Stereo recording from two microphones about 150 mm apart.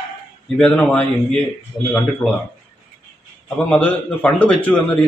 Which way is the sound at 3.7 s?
5° left (ahead or behind).